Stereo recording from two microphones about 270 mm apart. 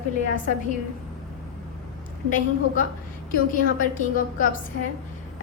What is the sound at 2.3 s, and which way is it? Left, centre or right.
A woman's voice, left.